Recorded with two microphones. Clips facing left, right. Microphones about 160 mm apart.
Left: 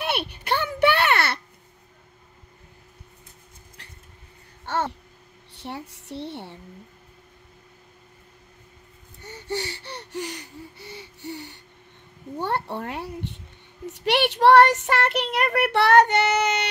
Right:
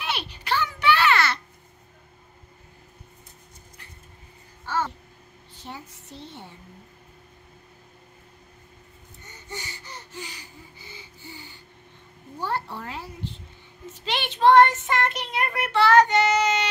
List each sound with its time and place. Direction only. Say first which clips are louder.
0.1 s a sound: even; 55° left (ahead or behind)
4.6 s babbling: left 1 dB; 65° left (ahead or behind)
5.5 s a woman's voice: left 5 dB; 70° left (ahead or behind)
9.2 s a sound: left 9 dB; 70° left (ahead or behind)
12.4 s speech: left 3 dB; 65° left (ahead or behind)
13.9 s child singing: left 8 dB; 65° left (ahead or behind)